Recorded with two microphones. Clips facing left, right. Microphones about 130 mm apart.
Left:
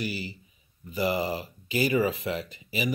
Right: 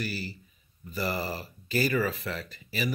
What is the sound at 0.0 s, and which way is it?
Speech, 15° left (ahead or behind).